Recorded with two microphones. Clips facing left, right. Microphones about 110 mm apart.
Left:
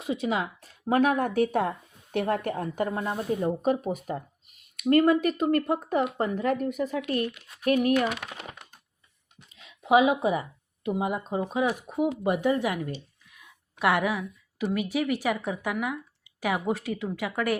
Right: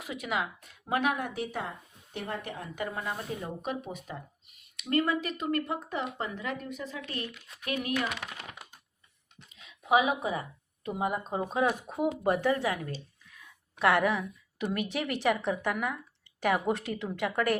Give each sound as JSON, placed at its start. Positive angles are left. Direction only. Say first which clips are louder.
{"t": 0.0, "sound": "a woman's voice", "louder": "left 5 dB", "side_deg": 30}
{"t": 2.9, "sound": "speech", "louder": "left 7 dB", "side_deg": 30}
{"t": 9.6, "sound": "a woman's voice", "louder": "left 5 dB", "side_deg": 30}
{"t": 11.1, "sound": "speech", "louder": "left 3 dB", "side_deg": 5}